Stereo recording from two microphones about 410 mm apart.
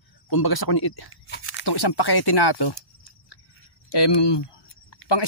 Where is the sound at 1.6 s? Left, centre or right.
Left.